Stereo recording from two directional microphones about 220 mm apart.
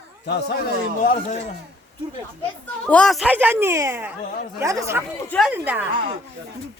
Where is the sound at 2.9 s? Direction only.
5° left (ahead or behind); by 5.0 s 15° right (ahead or behind).